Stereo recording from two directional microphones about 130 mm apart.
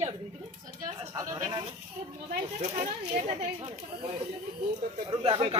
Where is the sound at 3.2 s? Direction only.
55° right (ahead or behind).